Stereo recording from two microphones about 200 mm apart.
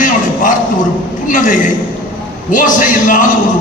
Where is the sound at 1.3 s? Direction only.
40° left (ahead or behind).